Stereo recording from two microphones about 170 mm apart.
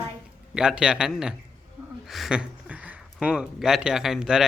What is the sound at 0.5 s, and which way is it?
Speech, 5° right (ahead or behind).